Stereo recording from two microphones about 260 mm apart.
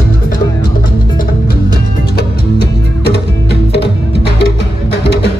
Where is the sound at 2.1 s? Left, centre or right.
Left.